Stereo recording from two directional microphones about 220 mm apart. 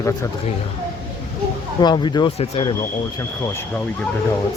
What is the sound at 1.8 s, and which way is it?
Speech, 20° left (ahead or behind).